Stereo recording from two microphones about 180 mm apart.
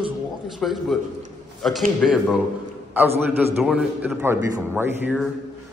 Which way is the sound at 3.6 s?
5° right (ahead or behind).